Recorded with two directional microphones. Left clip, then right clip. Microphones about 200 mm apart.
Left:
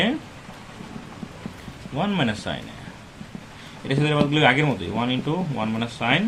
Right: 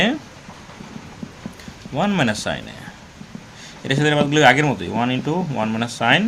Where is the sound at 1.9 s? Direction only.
50° right (ahead or behind).